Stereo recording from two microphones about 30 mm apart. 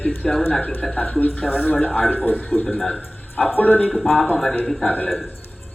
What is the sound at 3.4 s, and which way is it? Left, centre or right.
Speech, left.